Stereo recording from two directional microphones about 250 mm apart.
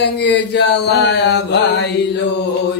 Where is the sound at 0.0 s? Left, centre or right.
Left.